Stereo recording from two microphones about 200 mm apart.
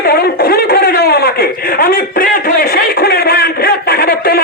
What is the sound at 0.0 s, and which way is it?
Chuckle, 50° left (ahead or behind).